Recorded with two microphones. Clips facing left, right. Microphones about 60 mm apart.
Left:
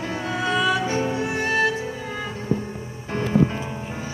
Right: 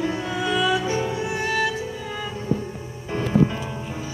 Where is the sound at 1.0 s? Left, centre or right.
Left; by 4.0 s centre.